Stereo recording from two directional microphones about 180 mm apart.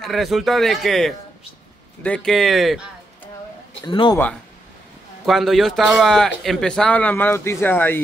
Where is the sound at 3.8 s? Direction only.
25° left (ahead or behind).